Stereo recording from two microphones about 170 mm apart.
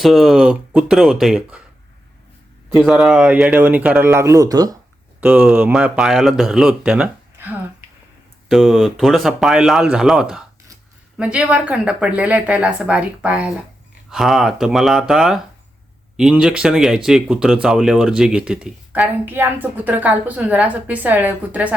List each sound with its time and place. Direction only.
0.0 s speech: centre (ahead or behind)
2.6 s speech: centre (ahead or behind); by 4.8 s 20° right (ahead or behind)
5.2 s speech: 5° right (ahead or behind)
8.4 s speech: centre (ahead or behind)